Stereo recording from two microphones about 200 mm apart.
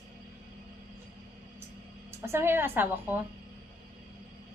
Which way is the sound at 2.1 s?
10° right (ahead or behind).